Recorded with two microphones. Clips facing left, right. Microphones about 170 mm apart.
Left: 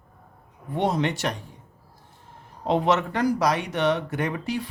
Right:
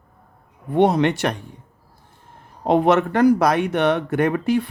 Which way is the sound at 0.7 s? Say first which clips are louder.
Right 8 dB; 65° right (ahead or behind).